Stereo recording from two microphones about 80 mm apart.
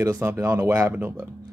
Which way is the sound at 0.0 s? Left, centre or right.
Right.